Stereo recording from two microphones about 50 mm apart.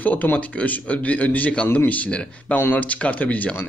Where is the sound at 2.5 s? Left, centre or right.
Left.